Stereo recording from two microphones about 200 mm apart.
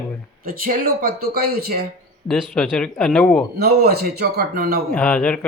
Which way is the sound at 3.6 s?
50° right (ahead or behind).